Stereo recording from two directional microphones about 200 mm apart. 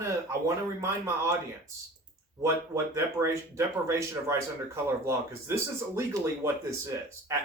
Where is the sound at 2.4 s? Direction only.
15° right (ahead or behind).